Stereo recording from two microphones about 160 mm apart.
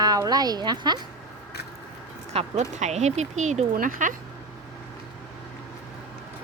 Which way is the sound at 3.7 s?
60° right (ahead or behind).